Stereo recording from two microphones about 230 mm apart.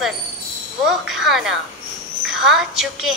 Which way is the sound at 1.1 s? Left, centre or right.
Centre.